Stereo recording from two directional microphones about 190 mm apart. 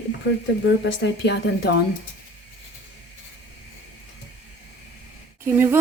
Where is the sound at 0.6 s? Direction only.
65° left (ahead or behind).